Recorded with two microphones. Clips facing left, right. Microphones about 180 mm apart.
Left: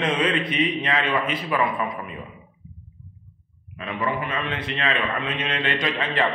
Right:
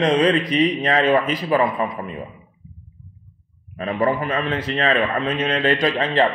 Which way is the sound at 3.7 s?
40° right (ahead or behind).